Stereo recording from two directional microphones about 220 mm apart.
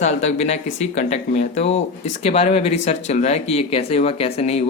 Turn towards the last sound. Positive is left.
turn(degrees=30)  # may be behind; listen again after turning